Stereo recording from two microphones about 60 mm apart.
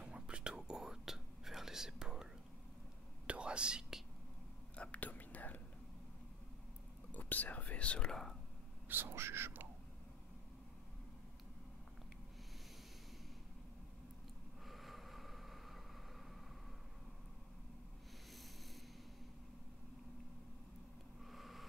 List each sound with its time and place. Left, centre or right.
0.0 s whispering: centre
3.3 s whispering: centre
4.7 s whispering: left
7.1 s whispering: left; by 8.4 s centre
8.8 s speech: right
14.6 s vehicle: centre
21.2 s a sound: centre